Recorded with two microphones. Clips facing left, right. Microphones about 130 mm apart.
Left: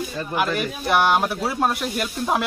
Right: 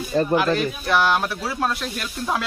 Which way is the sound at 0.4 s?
15° left (ahead or behind).